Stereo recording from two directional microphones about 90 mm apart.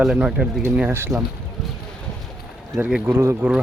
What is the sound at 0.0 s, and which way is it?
Speech, 5° right (ahead or behind).